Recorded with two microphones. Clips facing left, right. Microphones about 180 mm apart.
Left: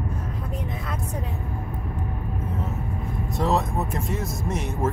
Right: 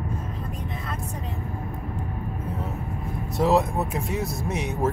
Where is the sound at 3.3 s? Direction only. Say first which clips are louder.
Right 3 dB; centre (ahead or behind).